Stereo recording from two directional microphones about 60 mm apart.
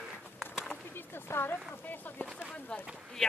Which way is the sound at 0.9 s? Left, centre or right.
Left.